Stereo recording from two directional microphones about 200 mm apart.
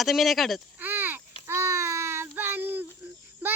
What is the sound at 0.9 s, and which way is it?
Child singing, 10° right (ahead or behind).